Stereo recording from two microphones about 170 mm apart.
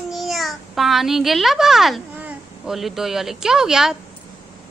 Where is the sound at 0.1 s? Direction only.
Centre (ahead or behind).